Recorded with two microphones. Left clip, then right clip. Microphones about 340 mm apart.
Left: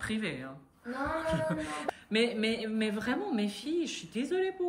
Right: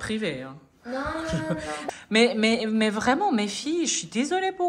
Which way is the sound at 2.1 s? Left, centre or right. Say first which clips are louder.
Right 9 dB; centre.